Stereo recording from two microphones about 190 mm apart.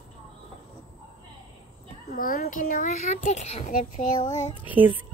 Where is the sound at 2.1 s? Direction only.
50° left (ahead or behind).